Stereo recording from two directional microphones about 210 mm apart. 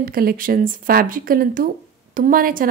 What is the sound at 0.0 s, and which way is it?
A woman's voice, 45° right (ahead or behind).